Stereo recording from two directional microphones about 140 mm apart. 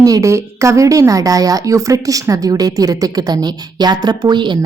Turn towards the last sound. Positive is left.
turn(degrees=-35)  # may be behind; listen again after turning